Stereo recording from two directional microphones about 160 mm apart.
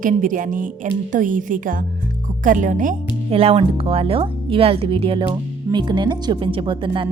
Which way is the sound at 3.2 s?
35° right (ahead or behind).